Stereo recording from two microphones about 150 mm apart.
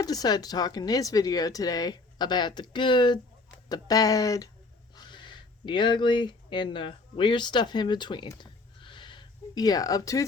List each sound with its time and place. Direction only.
0.0 s speech: 25° left (ahead or behind)